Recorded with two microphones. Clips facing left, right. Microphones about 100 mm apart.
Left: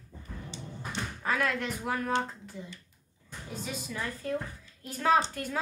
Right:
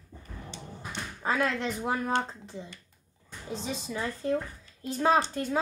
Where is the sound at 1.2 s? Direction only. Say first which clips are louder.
Right 2 dB; 25° right (ahead or behind).